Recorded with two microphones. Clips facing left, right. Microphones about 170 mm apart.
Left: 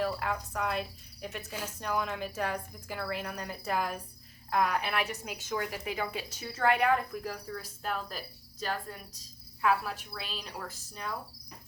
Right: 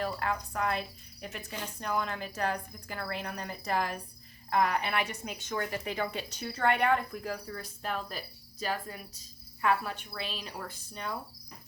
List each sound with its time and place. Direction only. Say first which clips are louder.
0.0 s a woman's voice: left 1 dB; centre (ahead or behind)